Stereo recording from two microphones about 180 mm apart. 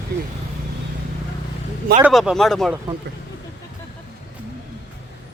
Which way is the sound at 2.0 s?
Centre (ahead or behind).